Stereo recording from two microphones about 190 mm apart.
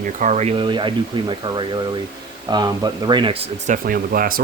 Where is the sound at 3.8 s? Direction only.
50° right (ahead or behind).